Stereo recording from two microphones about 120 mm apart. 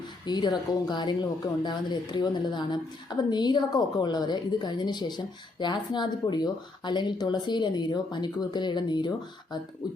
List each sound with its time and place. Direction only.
0.3 s a woman's voice: 35° left (ahead or behind)